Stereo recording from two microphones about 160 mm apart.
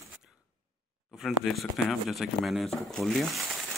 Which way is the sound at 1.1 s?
Centre (ahead or behind).